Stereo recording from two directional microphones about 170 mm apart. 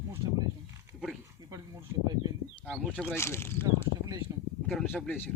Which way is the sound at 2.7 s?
5° right (ahead or behind).